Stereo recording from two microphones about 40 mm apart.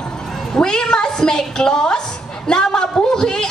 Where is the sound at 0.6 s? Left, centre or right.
Centre.